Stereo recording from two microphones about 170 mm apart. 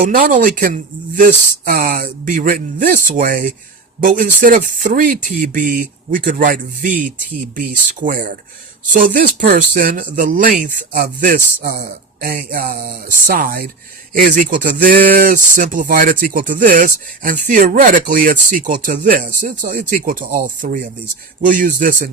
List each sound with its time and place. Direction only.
0.1 s speech: 50° right (ahead or behind)